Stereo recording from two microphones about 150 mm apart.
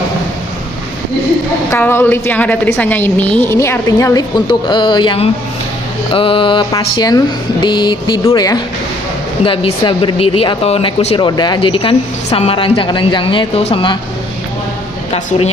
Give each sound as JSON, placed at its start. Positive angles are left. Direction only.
{"t": 1.7, "sound": "a woman's voice", "side_deg": 15}
{"t": 9.4, "sound": "a woman's voice", "side_deg": 35}
{"t": 11.2, "sound": "a woman's voice", "side_deg": 30}